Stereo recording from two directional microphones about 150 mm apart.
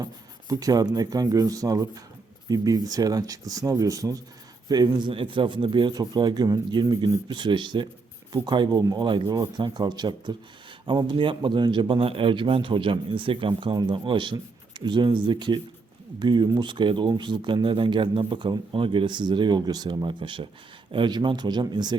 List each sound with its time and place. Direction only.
0.0 s speech: 25° right (ahead or behind)